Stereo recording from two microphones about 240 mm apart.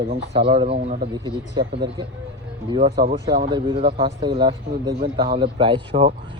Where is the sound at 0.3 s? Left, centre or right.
Right.